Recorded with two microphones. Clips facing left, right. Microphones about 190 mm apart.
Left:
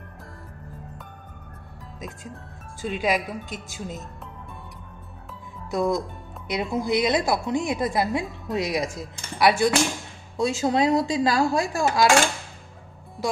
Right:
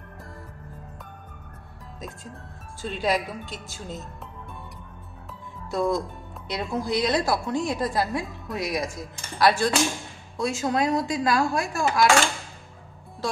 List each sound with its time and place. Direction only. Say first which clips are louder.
2.8 s speech: left 1 dB; 10° left (ahead or behind)
5.7 s a woman's voice: left 1 dB; 15° left (ahead or behind)
9.4 s speech: left 1 dB; 15° left (ahead or behind)
10.3 s a woman's voice: left 3 dB; 25° left (ahead or behind)